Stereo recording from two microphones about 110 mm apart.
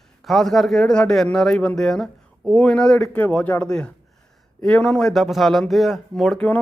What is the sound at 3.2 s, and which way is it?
Speech, 15° left (ahead or behind).